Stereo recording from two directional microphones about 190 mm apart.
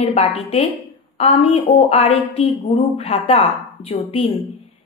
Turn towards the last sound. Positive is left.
turn(degrees=30)  # may be behind; listen again after turning